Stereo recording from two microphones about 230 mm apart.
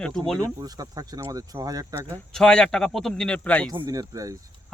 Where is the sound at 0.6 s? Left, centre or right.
Centre.